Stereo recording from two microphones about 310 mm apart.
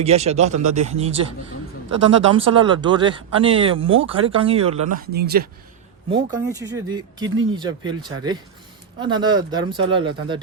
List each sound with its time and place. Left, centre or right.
0.0 s speech: centre
2.3 s speech: centre
5.1 s speech: right
6.3 s speech: centre